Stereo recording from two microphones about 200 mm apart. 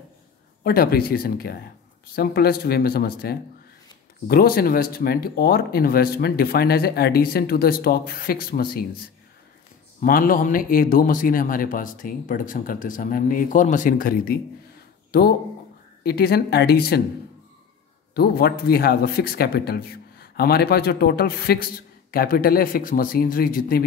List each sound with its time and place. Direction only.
0.7 s speech: 50° left (ahead or behind)
9.9 s speech: 45° left (ahead or behind)
18.1 s speech: 50° left (ahead or behind)